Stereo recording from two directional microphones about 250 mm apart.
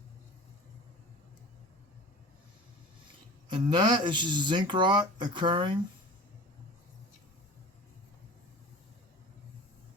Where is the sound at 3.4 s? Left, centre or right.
Centre.